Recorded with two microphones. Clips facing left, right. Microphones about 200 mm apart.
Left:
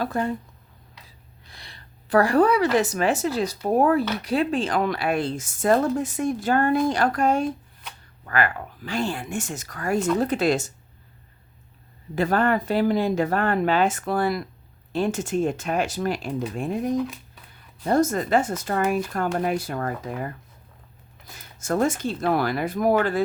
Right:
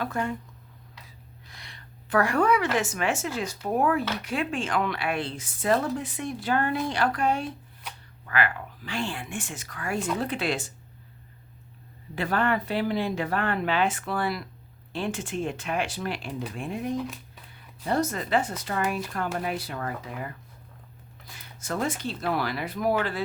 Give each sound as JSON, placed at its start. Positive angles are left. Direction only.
{"t": 0.0, "sound": "speech", "side_deg": 35}
{"t": 1.5, "sound": "a woman's voice", "side_deg": 35}
{"t": 12.1, "sound": "speech", "side_deg": 45}